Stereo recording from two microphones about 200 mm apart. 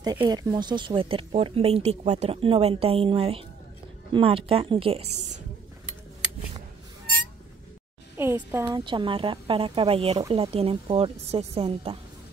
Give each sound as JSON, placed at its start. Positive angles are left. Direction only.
{"t": 0.0, "sound": "speech", "side_deg": -20}
{"t": 8.2, "sound": "a woman's voice", "side_deg": -10}
{"t": 8.8, "sound": "speech", "side_deg": -25}